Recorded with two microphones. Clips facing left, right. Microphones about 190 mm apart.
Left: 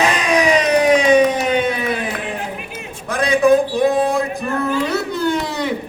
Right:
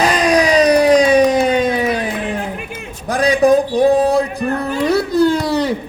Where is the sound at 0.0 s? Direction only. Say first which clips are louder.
Right 3 dB; 35° right (ahead or behind).